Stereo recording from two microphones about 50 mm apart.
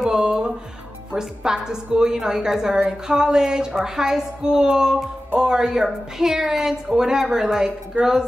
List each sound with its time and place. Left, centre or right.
0.0 s music: centre
1.1 s a woman's voice: centre